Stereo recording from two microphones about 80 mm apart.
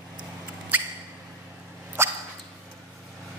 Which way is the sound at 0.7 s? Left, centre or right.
Centre.